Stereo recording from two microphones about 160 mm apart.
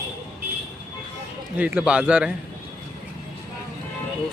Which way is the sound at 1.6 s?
10° right (ahead or behind).